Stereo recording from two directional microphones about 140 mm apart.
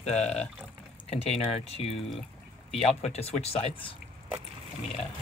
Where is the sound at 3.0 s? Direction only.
45° left (ahead or behind).